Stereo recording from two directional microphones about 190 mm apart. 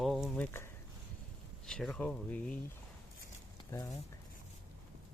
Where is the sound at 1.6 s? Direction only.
5° left (ahead or behind).